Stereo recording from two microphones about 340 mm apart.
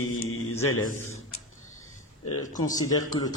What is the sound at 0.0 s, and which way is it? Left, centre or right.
Mantra, left.